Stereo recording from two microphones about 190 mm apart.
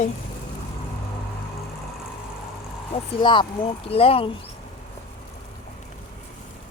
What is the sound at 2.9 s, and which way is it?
Speech, 25° left (ahead or behind).